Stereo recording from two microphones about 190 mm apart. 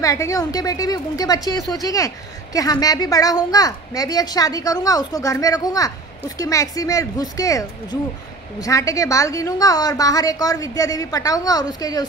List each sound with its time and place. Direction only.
0.0 s a woman's voice: 15° left (ahead or behind)